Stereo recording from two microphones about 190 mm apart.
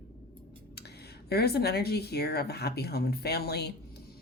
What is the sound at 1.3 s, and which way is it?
Speech, 60° left (ahead or behind).